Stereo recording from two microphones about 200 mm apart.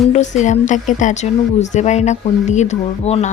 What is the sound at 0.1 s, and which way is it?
Speech, 35° left (ahead or behind).